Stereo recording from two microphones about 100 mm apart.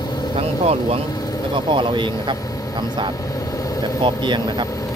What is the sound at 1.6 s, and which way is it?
Speech, 55° right (ahead or behind).